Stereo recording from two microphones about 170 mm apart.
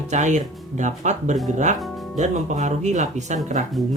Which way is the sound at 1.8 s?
Centre (ahead or behind).